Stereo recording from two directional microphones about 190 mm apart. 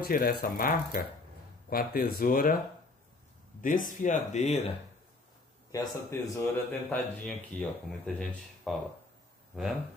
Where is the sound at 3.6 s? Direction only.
45° left (ahead or behind).